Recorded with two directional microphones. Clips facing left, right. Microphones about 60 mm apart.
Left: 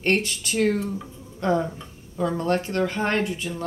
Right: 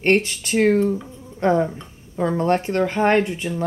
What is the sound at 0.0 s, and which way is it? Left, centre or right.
Speech, right.